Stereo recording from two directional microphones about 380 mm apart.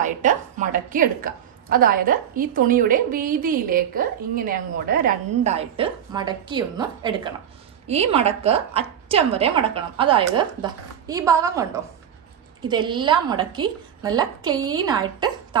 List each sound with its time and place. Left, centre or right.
0.0 s a woman's voice: centre